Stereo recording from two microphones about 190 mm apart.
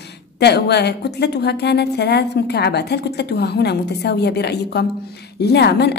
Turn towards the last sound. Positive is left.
turn(degrees=60)  # may be behind; listen again after turning